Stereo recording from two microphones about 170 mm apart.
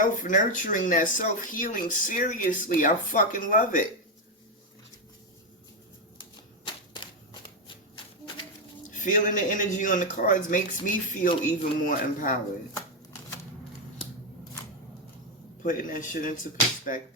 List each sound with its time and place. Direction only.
0.0 s speech: 50° left (ahead or behind)
8.9 s speech: 50° left (ahead or behind)
15.6 s speech: 50° left (ahead or behind)